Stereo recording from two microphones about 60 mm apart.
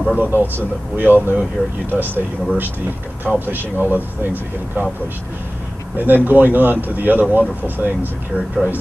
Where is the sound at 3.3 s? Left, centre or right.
Right.